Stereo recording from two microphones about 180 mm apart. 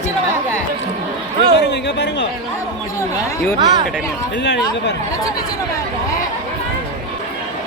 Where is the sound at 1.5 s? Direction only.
75° left (ahead or behind).